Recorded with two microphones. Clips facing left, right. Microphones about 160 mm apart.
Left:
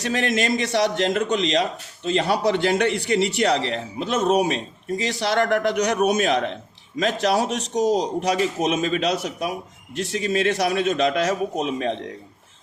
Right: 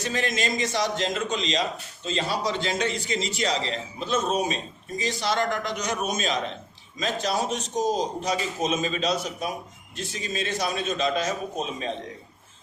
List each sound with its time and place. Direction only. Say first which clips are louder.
0.0 s a man's voice: left 5 dB; 70° left (ahead or behind)